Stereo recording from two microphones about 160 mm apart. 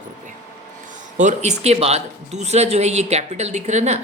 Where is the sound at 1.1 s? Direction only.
45° right (ahead or behind).